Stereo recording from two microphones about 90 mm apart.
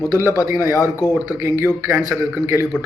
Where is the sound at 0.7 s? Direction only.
35° left (ahead or behind).